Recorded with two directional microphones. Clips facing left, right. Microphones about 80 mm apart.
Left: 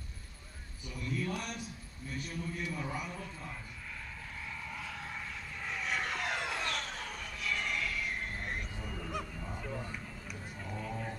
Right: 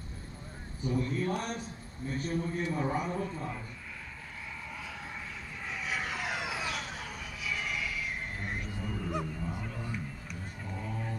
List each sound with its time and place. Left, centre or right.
0.8 s a man's voice: right
5.7 s vehicle: centre
8.8 s a sound: centre
9.2 s dog: centre